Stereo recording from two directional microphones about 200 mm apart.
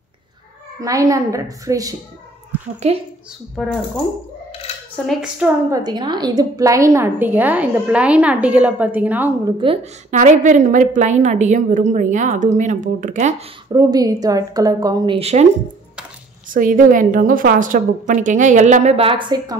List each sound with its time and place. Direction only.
0.7 s a woman's voice: 15° right (ahead or behind)
3.5 s speech: centre (ahead or behind)
4.9 s speech: centre (ahead or behind)
5.7 s a woman's voice: 20° right (ahead or behind)
9.6 s a woman's voice: 25° right (ahead or behind)
10.1 s a woman's voice: 40° right (ahead or behind)
13.7 s a woman's voice: 20° right (ahead or behind)
16.4 s a woman's voice: 40° right (ahead or behind); by 19.5 s 20° right (ahead or behind)